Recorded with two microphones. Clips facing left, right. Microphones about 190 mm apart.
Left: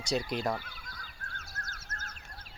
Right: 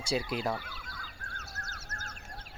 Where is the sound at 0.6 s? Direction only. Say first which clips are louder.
Right 3 dB; 40° left (ahead or behind).